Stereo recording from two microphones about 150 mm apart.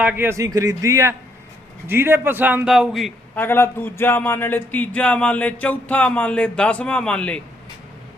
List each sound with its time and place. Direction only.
0.0 s a man's voice: 10° right (ahead or behind)
3.3 s speech: 15° left (ahead or behind)